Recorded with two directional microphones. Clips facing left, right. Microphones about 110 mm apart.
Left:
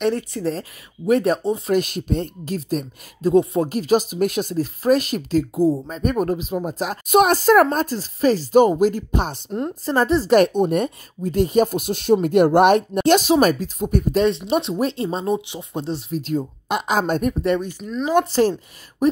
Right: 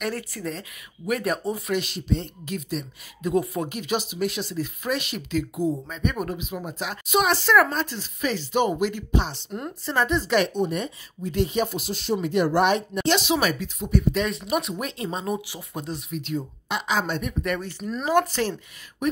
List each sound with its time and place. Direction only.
0.0 s speech: 25° left (ahead or behind)
1.7 s a woman's voice: 45° left (ahead or behind)
2.4 s a woman's voice: 40° left (ahead or behind)
14.5 s speech: 30° left (ahead or behind); by 17.5 s 45° left (ahead or behind)
17.6 s speech: 15° left (ahead or behind)
18.1 s speech: 30° left (ahead or behind)